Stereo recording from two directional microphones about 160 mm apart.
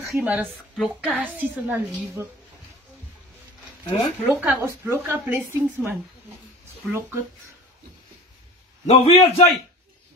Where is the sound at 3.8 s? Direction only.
30° left (ahead or behind).